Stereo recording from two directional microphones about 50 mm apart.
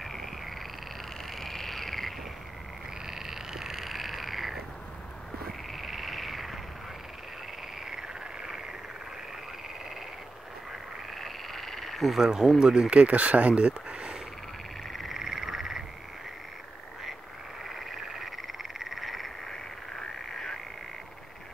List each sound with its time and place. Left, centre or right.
0.0 s frog: centre
1.3 s frog: centre
3.1 s frog: centre
5.8 s frog: centre
7.8 s frog: centre
11.1 s frog: centre
13.0 s speech: right
14.9 s frog: centre
17.6 s frog: centre